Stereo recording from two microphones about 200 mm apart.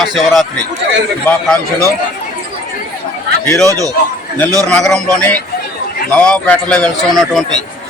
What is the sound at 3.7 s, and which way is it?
Speech, 15° right (ahead or behind).